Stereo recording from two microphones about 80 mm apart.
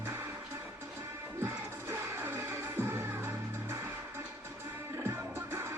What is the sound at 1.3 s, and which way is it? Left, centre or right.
Music, right.